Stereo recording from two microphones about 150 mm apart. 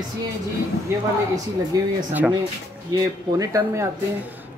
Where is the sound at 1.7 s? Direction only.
25° right (ahead or behind).